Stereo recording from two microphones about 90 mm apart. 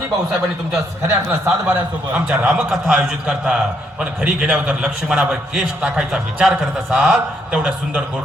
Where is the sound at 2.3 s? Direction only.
15° right (ahead or behind).